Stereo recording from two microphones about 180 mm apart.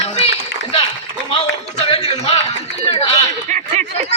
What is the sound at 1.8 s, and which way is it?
Speech, 35° left (ahead or behind).